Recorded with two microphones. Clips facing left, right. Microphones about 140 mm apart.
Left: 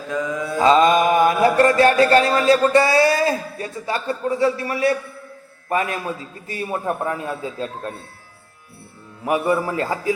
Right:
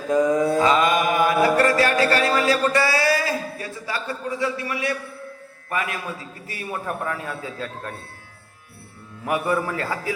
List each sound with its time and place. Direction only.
0.1 s mantra: 35° right (ahead or behind)
0.6 s music: 30° left (ahead or behind)
2.0 s a man's voice: 25° left (ahead or behind)
9.2 s a man's voice: 20° left (ahead or behind)